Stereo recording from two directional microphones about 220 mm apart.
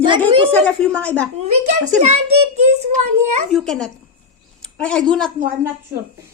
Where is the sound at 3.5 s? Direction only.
Centre (ahead or behind).